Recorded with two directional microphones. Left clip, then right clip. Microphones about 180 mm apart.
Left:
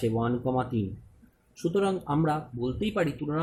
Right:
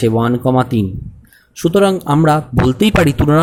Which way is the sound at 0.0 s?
40° right (ahead or behind).